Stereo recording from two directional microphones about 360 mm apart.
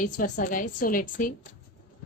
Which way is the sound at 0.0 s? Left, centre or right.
Left.